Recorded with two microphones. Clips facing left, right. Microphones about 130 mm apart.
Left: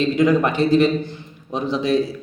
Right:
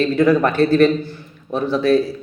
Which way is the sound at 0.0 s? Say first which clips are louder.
Right 2 dB; 15° left (ahead or behind).